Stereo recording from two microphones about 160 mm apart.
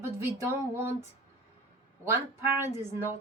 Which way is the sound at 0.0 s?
15° right (ahead or behind).